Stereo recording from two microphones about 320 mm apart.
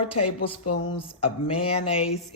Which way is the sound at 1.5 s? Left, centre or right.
Centre.